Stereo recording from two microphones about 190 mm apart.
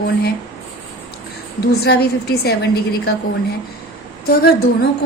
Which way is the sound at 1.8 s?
55° left (ahead or behind).